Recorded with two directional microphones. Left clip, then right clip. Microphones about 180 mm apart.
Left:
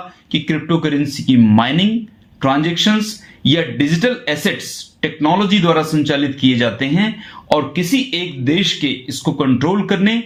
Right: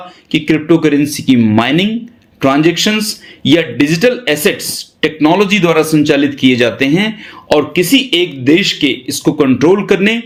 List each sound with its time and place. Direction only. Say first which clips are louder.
0.3 s a man's voice: right 7 dB; 40° right (ahead or behind)